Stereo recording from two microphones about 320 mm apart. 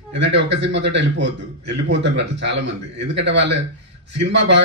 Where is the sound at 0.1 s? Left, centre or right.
Right.